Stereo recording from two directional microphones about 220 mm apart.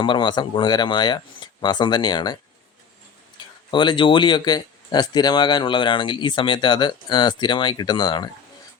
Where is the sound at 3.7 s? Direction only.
20° left (ahead or behind).